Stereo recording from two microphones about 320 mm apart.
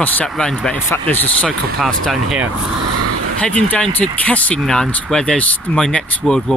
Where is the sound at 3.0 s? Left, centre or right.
Right.